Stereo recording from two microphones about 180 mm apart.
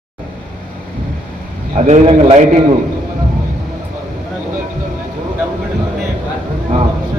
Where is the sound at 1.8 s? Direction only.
35° right (ahead or behind).